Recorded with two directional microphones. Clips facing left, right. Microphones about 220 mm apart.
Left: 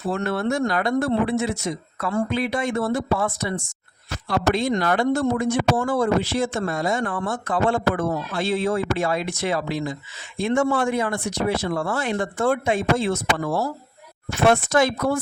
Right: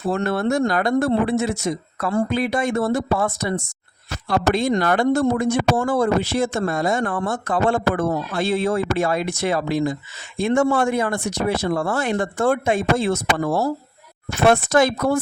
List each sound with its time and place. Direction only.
0.1 s speech: 45° right (ahead or behind)